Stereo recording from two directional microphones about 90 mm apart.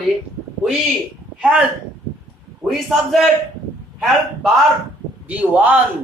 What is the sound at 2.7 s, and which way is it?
Speech, 5° right (ahead or behind).